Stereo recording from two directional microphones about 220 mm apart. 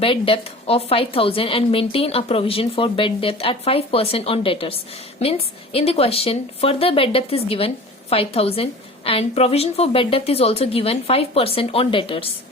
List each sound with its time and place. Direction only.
0.0 s a woman's voice: 25° left (ahead or behind)